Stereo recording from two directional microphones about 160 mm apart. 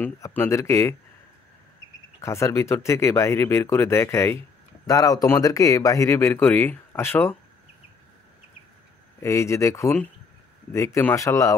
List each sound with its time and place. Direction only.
0.0 s speech: 10° left (ahead or behind)
2.2 s speech: 15° left (ahead or behind)
9.2 s speech: 15° left (ahead or behind)